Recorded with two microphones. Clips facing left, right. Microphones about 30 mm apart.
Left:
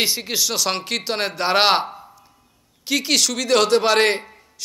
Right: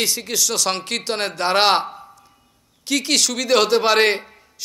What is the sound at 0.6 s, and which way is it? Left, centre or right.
A man's voice, centre.